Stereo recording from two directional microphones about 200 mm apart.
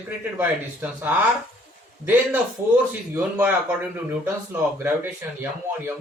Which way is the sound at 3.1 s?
10° right (ahead or behind).